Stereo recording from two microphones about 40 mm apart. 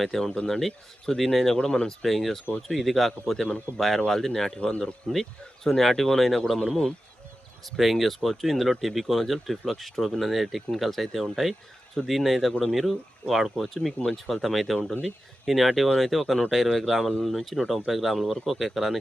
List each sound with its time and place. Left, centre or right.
0.0 s speech: centre
1.5 s speech: centre
6.6 s speech: centre
7.6 s speech: centre